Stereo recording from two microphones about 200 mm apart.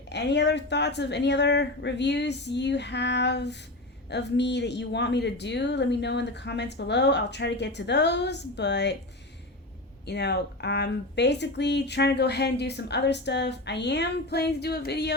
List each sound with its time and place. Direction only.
0.1 s speech: 60° left (ahead or behind)
10.1 s speech: 55° left (ahead or behind)